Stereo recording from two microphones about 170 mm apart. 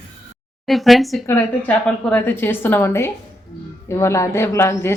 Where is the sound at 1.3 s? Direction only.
10° left (ahead or behind).